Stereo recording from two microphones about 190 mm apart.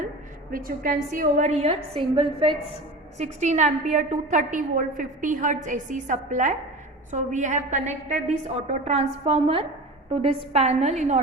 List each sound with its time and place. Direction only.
0.5 s a woman's voice: 50° right (ahead or behind)